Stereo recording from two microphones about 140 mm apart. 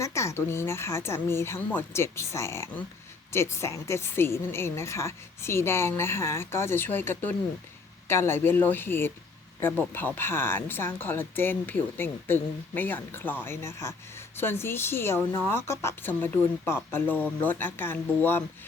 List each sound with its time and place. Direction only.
0.0 s speech: 20° left (ahead or behind)